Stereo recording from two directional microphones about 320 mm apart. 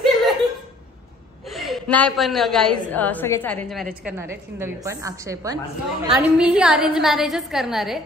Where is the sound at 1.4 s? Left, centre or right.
Centre.